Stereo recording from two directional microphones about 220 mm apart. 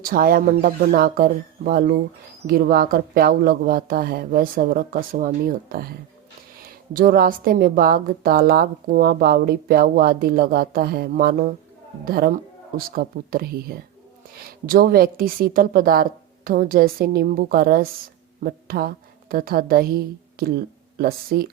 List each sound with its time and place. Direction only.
0.0 s a woman's voice: 40° right (ahead or behind)
21.0 s a woman's voice: 40° right (ahead or behind)